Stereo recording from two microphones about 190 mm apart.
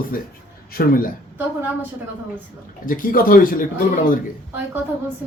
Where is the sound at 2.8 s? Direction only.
45° left (ahead or behind).